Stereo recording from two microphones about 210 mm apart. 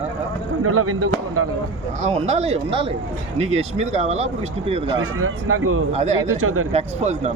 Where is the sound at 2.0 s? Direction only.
30° right (ahead or behind).